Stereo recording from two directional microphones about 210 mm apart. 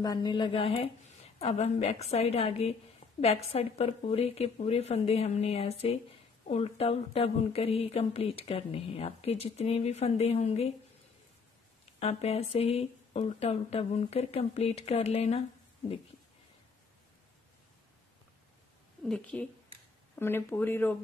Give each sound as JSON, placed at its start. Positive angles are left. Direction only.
{"t": 0.0, "sound": "speech", "side_deg": 20}
{"t": 12.0, "sound": "speech", "side_deg": 30}
{"t": 19.0, "sound": "speech", "side_deg": 0}